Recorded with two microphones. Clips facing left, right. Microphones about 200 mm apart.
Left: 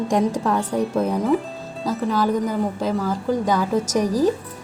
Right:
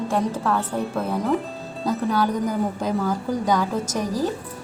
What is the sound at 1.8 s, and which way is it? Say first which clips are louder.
A woman's voice: left 1 dB; centre (ahead or behind).